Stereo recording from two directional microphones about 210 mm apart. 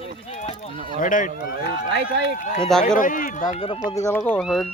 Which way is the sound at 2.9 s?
40° left (ahead or behind).